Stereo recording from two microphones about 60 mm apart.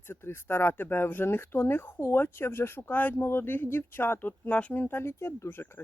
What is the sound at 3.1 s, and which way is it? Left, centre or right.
Speech, left.